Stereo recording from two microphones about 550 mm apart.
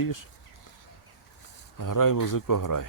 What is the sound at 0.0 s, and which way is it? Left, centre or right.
Speech, left.